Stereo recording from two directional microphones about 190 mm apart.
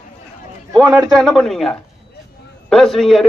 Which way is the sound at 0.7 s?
20° right (ahead or behind).